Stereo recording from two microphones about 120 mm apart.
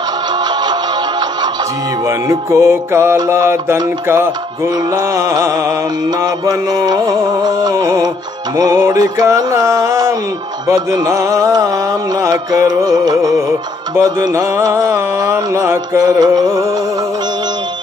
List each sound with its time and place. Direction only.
2.0 s music: 25° right (ahead or behind)